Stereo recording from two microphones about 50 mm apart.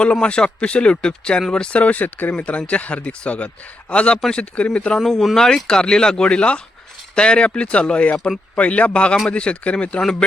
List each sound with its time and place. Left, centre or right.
0.0 s speech: left
4.9 s speech: centre
5.6 s speech: centre
10.0 s speech: centre